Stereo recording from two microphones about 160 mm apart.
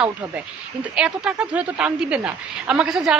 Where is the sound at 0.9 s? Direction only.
5° right (ahead or behind).